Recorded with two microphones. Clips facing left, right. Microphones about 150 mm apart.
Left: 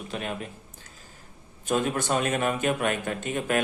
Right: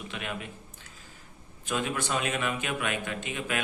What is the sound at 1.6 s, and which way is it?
A man's voice, 45° left (ahead or behind).